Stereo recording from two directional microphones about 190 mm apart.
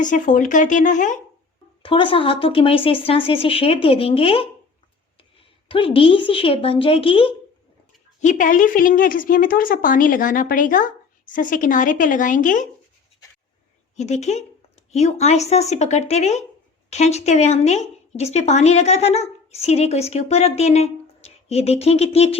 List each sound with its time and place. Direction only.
0.0 s a woman's voice: 40° left (ahead or behind)
1.8 s a woman's voice: 30° left (ahead or behind)
5.6 s a woman's voice: 30° left (ahead or behind)
8.2 s a woman's voice: 40° left (ahead or behind)
13.9 s a woman's voice: 35° left (ahead or behind)